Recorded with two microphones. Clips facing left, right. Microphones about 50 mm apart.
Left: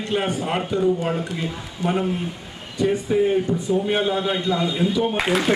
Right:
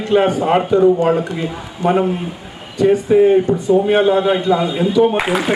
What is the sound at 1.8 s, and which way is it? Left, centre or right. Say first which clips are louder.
Speech: right 7 dB; right.